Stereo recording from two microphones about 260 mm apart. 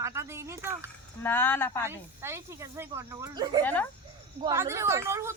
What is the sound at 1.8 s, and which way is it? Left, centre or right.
Speech, centre.